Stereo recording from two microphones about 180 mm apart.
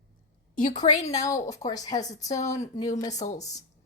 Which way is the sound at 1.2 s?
20° left (ahead or behind).